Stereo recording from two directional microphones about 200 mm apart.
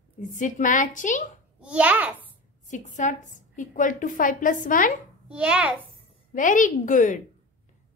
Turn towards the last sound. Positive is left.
turn(degrees=40)  # may be behind; listen again after turning